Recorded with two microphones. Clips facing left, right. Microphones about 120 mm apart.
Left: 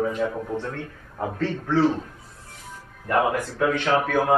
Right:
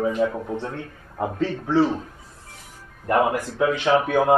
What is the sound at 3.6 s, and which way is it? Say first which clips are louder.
Speech: right 2 dB; 15° right (ahead or behind).